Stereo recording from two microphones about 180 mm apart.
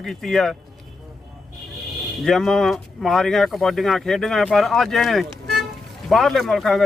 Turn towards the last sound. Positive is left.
turn(degrees=0)  # may be behind; listen again after turning